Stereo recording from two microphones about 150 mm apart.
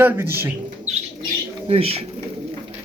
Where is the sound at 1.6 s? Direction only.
40° right (ahead or behind).